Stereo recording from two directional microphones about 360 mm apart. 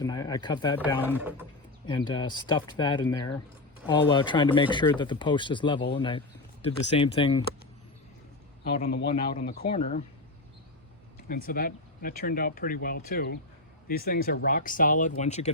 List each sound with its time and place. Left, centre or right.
0.0 s speech: centre
1.1 s speech: centre
1.9 s speech: centre
8.6 s speech: left
11.3 s speech: left